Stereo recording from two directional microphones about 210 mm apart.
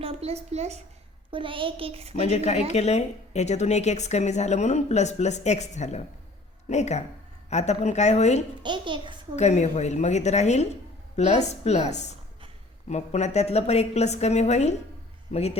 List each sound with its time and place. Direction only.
0.0 s speech: 30° right (ahead or behind)
2.2 s speech: 30° left (ahead or behind)
8.6 s speech: 20° right (ahead or behind)
9.3 s a man's voice: 35° left (ahead or behind)